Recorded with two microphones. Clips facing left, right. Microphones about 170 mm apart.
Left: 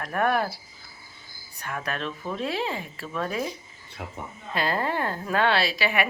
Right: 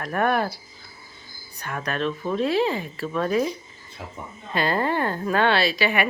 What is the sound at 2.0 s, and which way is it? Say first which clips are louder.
Speech: right 6 dB; 30° right (ahead or behind).